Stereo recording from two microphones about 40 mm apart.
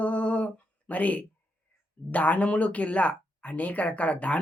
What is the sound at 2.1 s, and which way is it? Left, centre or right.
Speech, left.